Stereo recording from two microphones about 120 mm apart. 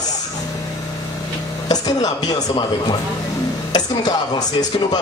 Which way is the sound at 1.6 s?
35° left (ahead or behind).